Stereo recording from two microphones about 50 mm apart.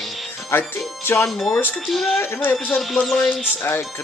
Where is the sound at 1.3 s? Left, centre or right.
Centre.